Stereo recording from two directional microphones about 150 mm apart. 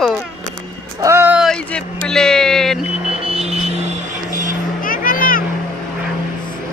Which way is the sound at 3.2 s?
45° right (ahead or behind).